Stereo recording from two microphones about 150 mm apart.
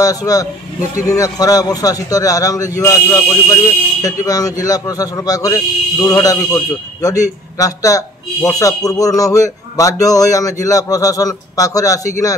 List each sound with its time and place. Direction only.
0.0 s a man's voice: 25° left (ahead or behind)